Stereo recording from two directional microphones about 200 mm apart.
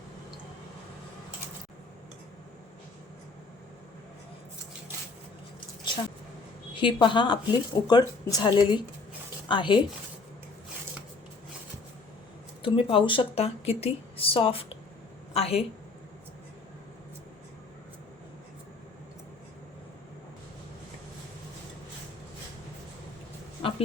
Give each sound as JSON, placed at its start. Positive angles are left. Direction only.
{"t": 6.7, "sound": "speech", "side_deg": 25}
{"t": 12.6, "sound": "a woman's voice", "side_deg": 25}